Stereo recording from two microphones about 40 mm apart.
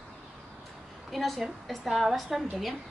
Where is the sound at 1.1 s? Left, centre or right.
Centre.